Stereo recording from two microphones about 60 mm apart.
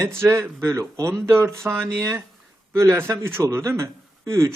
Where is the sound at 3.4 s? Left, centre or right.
Right.